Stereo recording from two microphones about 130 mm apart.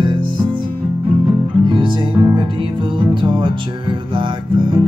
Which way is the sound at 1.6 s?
40° right (ahead or behind).